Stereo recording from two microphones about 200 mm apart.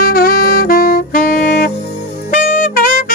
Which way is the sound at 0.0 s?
45° left (ahead or behind).